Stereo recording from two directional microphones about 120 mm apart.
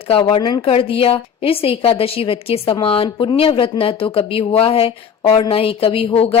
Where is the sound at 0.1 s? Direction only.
50° left (ahead or behind).